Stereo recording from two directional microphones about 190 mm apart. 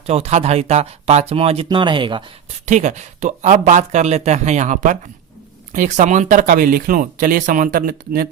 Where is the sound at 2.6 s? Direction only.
40° right (ahead or behind).